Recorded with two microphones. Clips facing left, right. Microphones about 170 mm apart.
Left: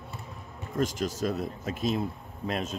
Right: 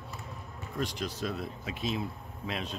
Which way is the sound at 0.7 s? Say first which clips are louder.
Left 6 dB; 45° left (ahead or behind).